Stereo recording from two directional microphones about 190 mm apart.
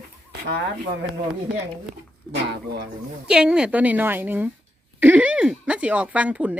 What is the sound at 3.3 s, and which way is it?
Speech, 5° right (ahead or behind).